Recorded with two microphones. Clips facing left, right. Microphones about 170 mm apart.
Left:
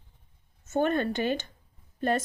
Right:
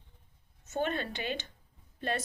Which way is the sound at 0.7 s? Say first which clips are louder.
Left 7 dB; 50° left (ahead or behind).